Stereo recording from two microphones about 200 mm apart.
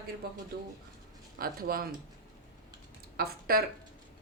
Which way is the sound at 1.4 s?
45° right (ahead or behind).